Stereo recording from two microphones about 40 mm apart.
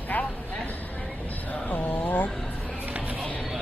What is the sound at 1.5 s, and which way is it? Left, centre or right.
Speech, left.